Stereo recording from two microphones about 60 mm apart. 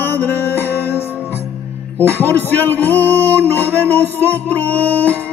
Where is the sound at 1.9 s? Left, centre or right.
Left.